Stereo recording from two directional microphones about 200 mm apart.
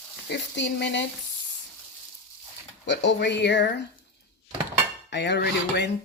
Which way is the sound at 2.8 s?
60° left (ahead or behind).